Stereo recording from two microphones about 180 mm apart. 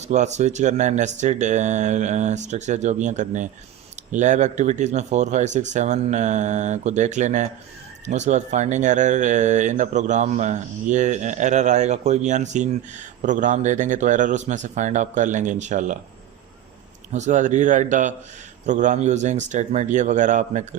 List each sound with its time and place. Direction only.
0.0 s a man's voice: 40° right (ahead or behind)
17.1 s a man's voice: 40° right (ahead or behind)